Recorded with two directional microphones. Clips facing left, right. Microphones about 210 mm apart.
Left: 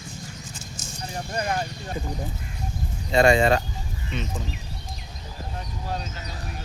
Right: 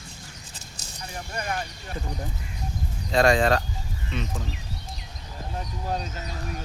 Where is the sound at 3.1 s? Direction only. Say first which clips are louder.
Left 2 dB; centre (ahead or behind).